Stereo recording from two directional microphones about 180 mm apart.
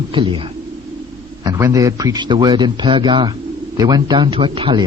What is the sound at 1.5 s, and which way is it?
A man's voice, 15° right (ahead or behind).